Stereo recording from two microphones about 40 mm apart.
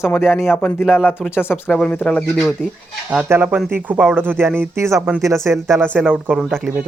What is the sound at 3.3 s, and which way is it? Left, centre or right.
Speech, right.